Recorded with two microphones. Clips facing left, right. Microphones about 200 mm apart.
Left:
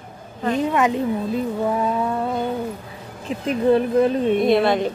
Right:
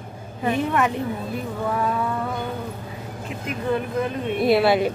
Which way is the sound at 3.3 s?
35° left (ahead or behind).